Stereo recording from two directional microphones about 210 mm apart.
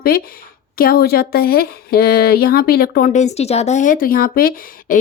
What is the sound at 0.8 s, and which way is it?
Speech, 45° left (ahead or behind).